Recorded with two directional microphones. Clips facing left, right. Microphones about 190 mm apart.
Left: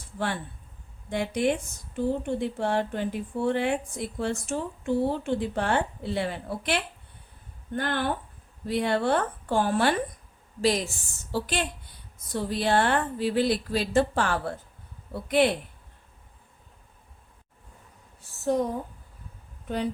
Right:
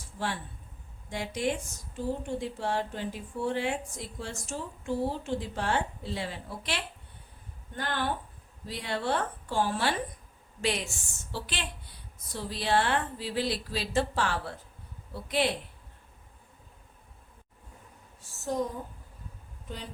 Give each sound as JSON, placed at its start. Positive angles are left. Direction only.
{"t": 1.1, "sound": "a woman's voice", "side_deg": 60}
{"t": 8.6, "sound": "a woman's voice", "side_deg": 55}
{"t": 10.6, "sound": "a woman's voice", "side_deg": 40}
{"t": 18.2, "sound": "a sound", "side_deg": 65}
{"t": 19.6, "sound": "speech", "side_deg": 60}